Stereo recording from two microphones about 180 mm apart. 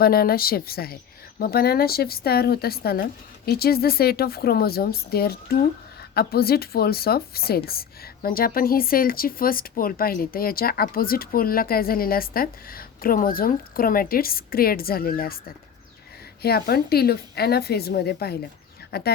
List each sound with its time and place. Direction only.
0.0 s speech: 55° left (ahead or behind)